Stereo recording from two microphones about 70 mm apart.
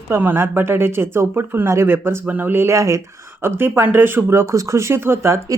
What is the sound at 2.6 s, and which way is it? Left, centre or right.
Speech, right.